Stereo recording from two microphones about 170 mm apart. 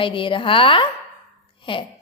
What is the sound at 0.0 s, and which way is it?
A woman's voice, 30° left (ahead or behind).